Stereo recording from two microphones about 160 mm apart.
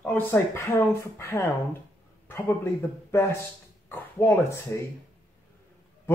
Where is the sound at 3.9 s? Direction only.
15° left (ahead or behind).